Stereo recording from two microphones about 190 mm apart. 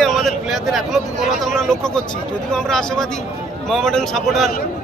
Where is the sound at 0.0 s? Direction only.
Centre (ahead or behind).